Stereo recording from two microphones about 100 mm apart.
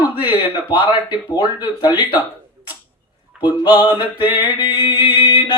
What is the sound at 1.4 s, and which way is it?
Speech, 40° left (ahead or behind).